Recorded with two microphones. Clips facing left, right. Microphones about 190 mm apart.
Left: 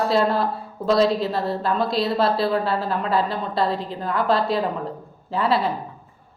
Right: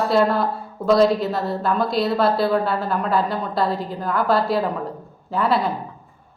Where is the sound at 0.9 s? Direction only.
Centre (ahead or behind).